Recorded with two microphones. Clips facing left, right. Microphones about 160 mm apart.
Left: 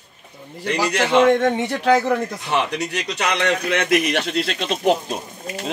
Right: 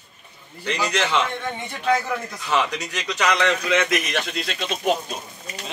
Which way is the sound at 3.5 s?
60° left (ahead or behind).